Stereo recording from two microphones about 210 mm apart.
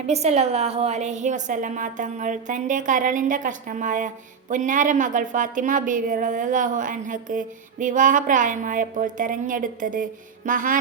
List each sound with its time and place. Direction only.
0.1 s a woman's voice: 30° right (ahead or behind)